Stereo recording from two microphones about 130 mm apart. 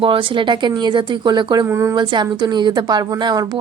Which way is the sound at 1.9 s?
35° right (ahead or behind).